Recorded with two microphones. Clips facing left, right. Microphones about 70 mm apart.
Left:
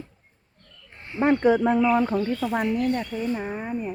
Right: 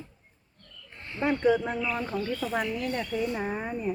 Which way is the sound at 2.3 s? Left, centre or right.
Left.